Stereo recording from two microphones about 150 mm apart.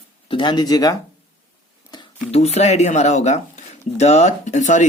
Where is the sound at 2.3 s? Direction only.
45° left (ahead or behind).